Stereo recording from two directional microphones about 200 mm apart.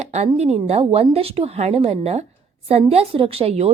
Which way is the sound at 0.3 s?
30° right (ahead or behind).